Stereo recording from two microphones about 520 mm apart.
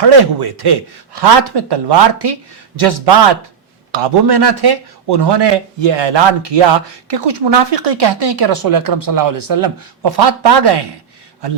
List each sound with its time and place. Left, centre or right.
0.0 s speech: right